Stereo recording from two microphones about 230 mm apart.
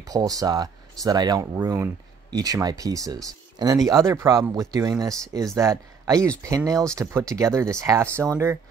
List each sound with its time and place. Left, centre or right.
0.0 s speech: centre